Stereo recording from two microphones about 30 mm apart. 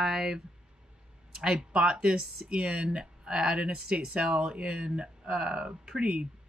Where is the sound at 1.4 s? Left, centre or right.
Right.